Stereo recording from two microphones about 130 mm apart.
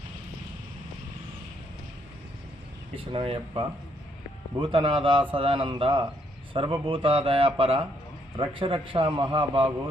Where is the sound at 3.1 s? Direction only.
45° right (ahead or behind).